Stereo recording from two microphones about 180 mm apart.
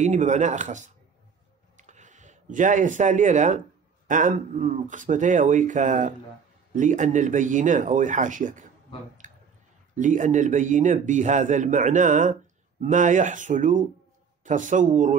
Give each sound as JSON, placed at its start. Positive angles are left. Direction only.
{"t": 0.0, "sound": "a man's voice", "side_deg": -40}
{"t": 9.2, "sound": "clicking", "side_deg": -45}
{"t": 9.9, "sound": "a man's voice", "side_deg": -45}